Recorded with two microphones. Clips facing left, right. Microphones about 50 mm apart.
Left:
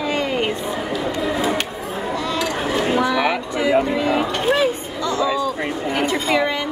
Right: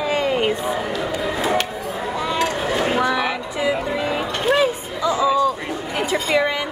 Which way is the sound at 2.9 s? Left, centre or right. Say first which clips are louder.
Left 3 dB; centre.